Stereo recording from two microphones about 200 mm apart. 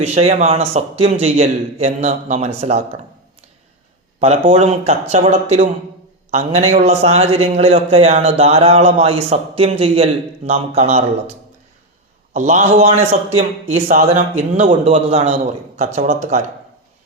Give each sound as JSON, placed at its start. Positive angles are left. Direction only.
{"t": 0.0, "sound": "a man's voice", "side_deg": -35}
{"t": 4.2, "sound": "a man's voice", "side_deg": -30}
{"t": 12.3, "sound": "a man's voice", "side_deg": -35}